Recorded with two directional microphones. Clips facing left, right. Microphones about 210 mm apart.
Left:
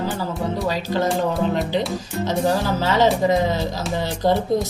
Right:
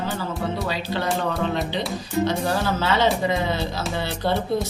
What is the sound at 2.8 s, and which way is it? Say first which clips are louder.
Speech: left 4 dB; 40° left (ahead or behind).